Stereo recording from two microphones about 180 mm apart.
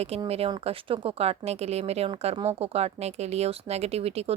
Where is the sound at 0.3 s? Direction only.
35° right (ahead or behind).